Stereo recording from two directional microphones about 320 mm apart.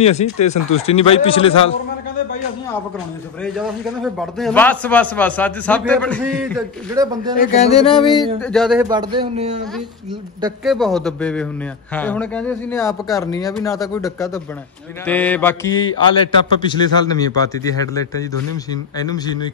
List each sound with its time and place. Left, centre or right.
0.0 s a man's voice: left
3.5 s a man's voice: centre
6.9 s a man's voice: centre
7.3 s a man's voice: centre
8.4 s a man's voice: centre
8.8 s a man's voice: centre
10.6 s a man's voice: centre